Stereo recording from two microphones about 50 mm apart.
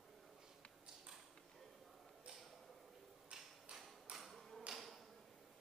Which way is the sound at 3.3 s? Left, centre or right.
Right.